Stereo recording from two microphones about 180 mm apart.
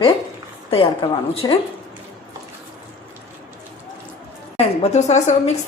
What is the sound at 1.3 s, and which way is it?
Speech, 30° left (ahead or behind).